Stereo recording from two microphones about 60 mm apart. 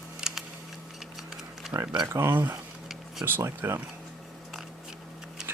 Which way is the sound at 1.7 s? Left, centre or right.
Centre.